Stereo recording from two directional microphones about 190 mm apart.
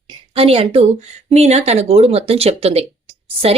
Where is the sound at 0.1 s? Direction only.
30° right (ahead or behind).